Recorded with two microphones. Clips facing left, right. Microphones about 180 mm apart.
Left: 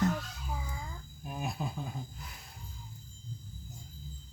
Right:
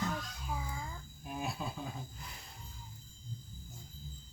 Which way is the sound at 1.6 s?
15° left (ahead or behind).